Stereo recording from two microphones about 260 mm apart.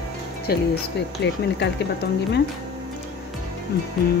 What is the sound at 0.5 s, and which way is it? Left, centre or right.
Speech, left.